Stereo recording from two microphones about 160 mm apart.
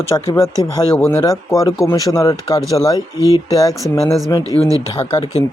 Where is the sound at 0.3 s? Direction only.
20° left (ahead or behind).